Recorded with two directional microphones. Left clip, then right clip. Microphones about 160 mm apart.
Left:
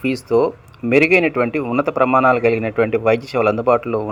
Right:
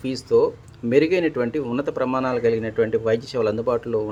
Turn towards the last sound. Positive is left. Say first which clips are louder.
# left 6 dB
turn(degrees=15)  # may be behind; listen again after turning